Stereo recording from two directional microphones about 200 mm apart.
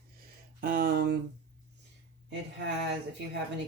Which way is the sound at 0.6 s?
50° right (ahead or behind).